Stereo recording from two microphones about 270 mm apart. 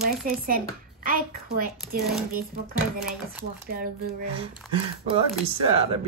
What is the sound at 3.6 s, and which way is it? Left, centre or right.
Speech, right.